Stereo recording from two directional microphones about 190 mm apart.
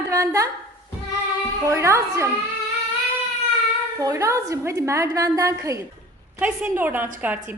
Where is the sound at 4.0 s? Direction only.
15° right (ahead or behind).